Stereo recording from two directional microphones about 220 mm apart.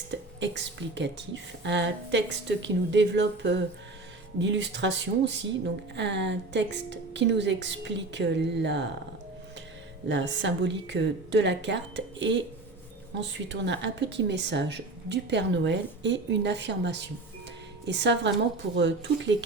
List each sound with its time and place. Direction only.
0.1 s speech: 55° right (ahead or behind)
10.1 s speech: 55° right (ahead or behind)